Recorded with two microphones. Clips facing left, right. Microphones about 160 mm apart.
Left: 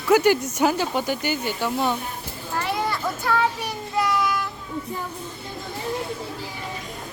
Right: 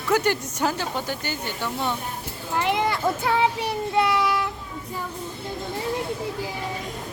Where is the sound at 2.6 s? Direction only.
20° right (ahead or behind).